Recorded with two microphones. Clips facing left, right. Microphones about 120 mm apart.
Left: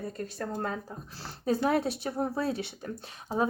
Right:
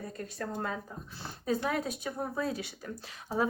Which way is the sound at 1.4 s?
30° left (ahead or behind).